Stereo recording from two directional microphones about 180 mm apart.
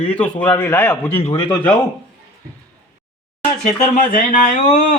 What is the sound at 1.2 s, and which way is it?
Speech, 25° left (ahead or behind).